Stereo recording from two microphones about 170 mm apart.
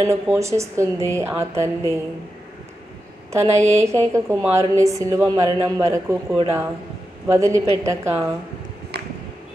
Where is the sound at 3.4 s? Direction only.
40° right (ahead or behind).